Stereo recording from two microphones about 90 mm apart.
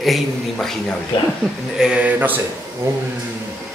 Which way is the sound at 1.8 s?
10° right (ahead or behind).